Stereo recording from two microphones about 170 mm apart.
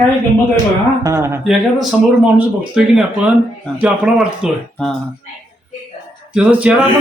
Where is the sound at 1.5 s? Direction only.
Centre (ahead or behind).